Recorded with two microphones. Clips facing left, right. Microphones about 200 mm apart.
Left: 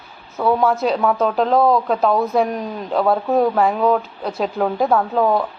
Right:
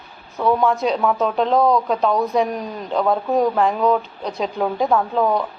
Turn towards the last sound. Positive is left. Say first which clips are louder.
# left 1 dB
turn(degrees=5)  # may be behind; listen again after turning